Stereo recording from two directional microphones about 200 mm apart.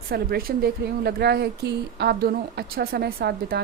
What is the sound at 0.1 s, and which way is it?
Speech, 50° right (ahead or behind).